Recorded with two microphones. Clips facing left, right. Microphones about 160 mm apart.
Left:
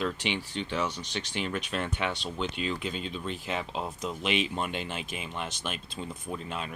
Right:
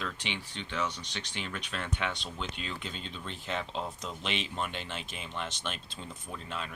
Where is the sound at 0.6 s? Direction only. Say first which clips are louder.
Left 3 dB; 35° left (ahead or behind).